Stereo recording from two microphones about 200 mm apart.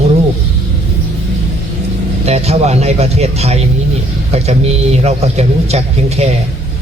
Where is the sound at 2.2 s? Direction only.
30° right (ahead or behind).